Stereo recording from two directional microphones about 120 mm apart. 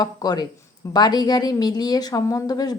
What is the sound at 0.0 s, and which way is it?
A woman's voice, 35° left (ahead or behind).